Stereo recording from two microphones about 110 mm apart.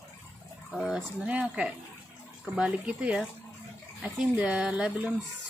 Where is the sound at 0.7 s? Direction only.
5° right (ahead or behind).